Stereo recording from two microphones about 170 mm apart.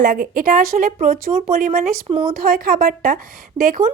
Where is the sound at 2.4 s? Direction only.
55° right (ahead or behind).